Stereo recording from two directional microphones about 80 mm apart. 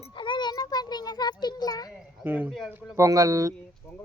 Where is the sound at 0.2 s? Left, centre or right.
Left.